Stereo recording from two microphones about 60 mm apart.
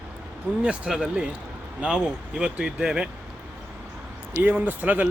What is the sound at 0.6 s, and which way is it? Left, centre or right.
Speech, centre.